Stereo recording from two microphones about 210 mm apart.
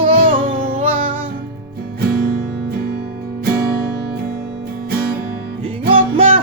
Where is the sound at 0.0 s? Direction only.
25° right (ahead or behind).